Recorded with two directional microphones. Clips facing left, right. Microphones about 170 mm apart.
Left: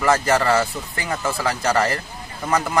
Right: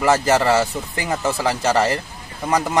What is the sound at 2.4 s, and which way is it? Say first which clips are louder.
Speech: right 2 dB; 15° right (ahead or behind).